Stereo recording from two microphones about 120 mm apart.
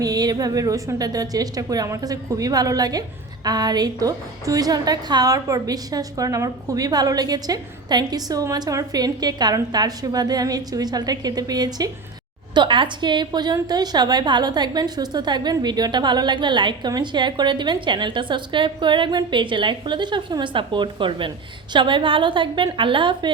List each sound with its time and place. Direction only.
0.0 s a woman's voice: 30° right (ahead or behind)
12.5 s a woman's voice: 45° right (ahead or behind)